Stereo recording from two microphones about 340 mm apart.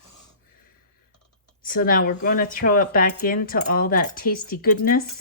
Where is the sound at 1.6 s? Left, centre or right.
Left.